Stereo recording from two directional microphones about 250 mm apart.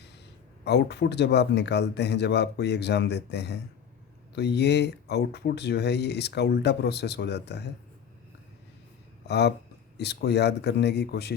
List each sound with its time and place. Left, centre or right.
0.6 s a man's voice: left
9.2 s speech: left